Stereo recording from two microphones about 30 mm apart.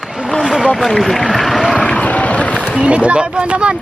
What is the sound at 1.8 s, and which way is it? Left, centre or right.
Vehicle, left.